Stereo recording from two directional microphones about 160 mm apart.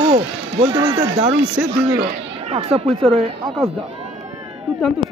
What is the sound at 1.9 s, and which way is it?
Speech, 40° right (ahead or behind).